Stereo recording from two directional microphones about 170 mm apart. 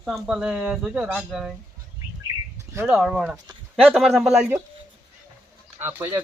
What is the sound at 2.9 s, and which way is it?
Speech, 5° right (ahead or behind).